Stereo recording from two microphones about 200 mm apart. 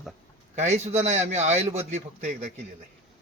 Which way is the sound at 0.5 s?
35° right (ahead or behind).